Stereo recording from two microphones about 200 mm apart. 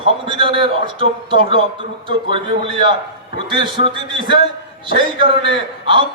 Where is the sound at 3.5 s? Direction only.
25° right (ahead or behind).